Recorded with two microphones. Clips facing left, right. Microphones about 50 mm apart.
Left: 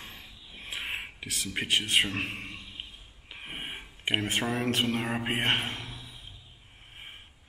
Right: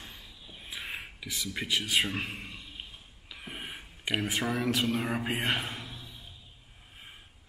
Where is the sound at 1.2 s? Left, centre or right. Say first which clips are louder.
Left 1 dB; left.